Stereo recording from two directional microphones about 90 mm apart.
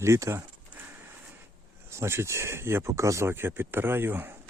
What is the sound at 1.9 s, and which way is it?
Speech, 30° right (ahead or behind).